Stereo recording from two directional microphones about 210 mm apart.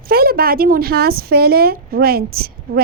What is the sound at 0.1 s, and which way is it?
A woman's voice, 45° right (ahead or behind).